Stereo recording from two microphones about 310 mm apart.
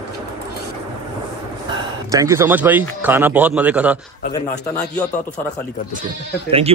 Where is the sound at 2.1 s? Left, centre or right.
Centre.